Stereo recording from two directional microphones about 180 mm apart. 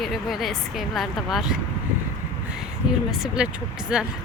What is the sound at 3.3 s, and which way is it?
Speech, 5° right (ahead or behind).